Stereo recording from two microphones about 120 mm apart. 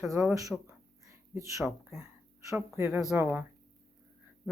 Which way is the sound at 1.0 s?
25° right (ahead or behind).